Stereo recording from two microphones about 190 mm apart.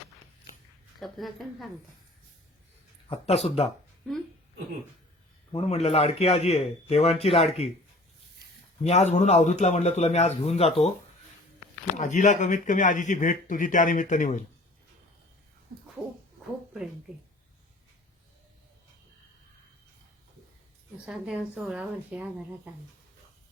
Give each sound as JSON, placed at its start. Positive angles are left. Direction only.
{"t": 0.9, "sound": "speech", "side_deg": 0}
{"t": 3.1, "sound": "speech", "side_deg": 35}
{"t": 5.5, "sound": "speech", "side_deg": 35}
{"t": 8.8, "sound": "speech", "side_deg": 35}
{"t": 11.9, "sound": "speech", "side_deg": 40}
{"t": 16.0, "sound": "a sound", "side_deg": 0}
{"t": 21.1, "sound": "speech", "side_deg": -5}